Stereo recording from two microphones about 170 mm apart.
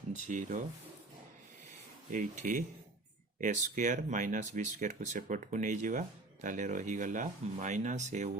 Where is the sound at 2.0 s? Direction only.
50° right (ahead or behind).